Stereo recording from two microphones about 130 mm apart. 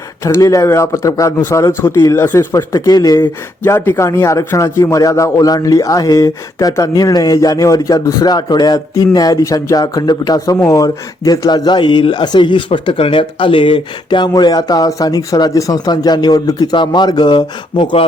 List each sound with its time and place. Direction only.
0.3 s a man's voice: 25° left (ahead or behind)
2.7 s a man's voice: 30° left (ahead or behind)
3.6 s a man's voice: 20° left (ahead or behind); by 18.0 s 40° left (ahead or behind)